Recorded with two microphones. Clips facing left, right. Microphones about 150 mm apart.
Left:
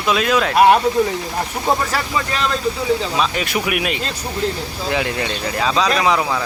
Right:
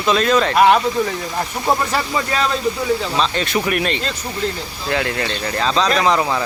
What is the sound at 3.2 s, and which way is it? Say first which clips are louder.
Speech: right 1 dB; 10° left (ahead or behind).